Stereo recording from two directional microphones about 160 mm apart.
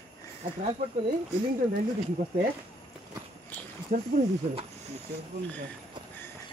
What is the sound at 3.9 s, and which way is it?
Speech, 55° right (ahead or behind).